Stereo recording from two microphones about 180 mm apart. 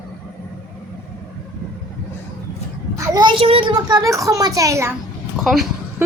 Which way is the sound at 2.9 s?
25° right (ahead or behind).